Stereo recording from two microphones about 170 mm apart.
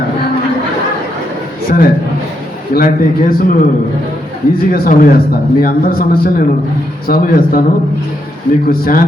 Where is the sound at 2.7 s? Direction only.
60° left (ahead or behind).